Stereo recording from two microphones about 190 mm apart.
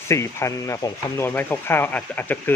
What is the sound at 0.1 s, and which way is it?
Speech, 15° left (ahead or behind).